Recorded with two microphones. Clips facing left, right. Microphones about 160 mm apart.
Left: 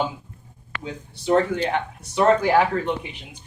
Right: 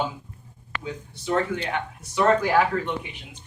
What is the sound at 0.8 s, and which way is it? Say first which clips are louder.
Speech: even; 30° left (ahead or behind).